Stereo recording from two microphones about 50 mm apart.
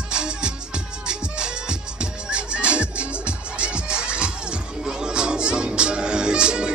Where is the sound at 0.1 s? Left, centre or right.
Centre.